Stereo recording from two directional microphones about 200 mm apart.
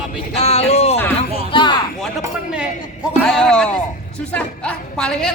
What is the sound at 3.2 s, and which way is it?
A woman's voice, 5° left (ahead or behind).